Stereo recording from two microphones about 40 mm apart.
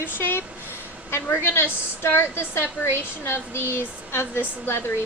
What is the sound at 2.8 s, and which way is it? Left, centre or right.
Speech, left.